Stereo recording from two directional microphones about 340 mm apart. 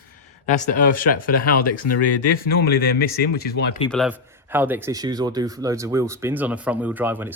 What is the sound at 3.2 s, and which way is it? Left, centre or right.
Speech, left.